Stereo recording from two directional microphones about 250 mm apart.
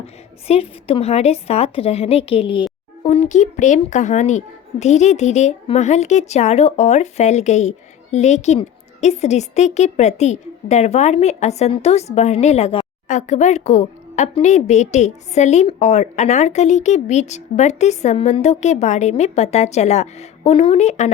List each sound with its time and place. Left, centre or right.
0.0 s speech: left